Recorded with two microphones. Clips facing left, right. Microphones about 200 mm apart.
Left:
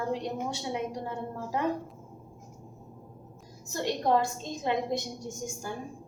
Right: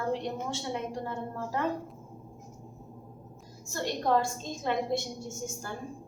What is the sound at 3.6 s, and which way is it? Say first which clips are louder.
A woman's voice: left 1 dB; 20° left (ahead or behind).